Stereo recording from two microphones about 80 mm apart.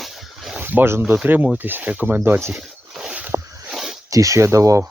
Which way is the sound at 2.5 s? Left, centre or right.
Centre.